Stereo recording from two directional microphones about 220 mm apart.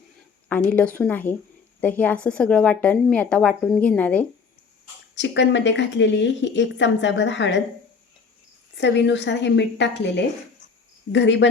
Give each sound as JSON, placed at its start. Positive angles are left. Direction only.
{"t": 0.4, "sound": "a woman's voice", "side_deg": 5}
{"t": 5.1, "sound": "a woman's voice", "side_deg": 55}
{"t": 8.8, "sound": "a woman's voice", "side_deg": 50}